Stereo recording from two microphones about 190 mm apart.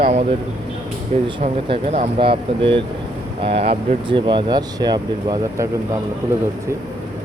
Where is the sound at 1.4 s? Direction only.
30° right (ahead or behind).